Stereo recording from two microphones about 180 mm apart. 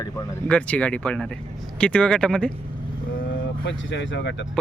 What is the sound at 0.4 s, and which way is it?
Speech, 5° left (ahead or behind).